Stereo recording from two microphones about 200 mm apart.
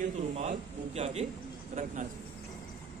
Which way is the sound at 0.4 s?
30° right (ahead or behind).